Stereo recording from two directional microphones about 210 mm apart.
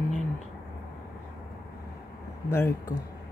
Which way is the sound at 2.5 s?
10° left (ahead or behind).